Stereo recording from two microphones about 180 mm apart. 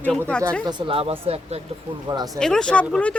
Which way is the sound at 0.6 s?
25° right (ahead or behind).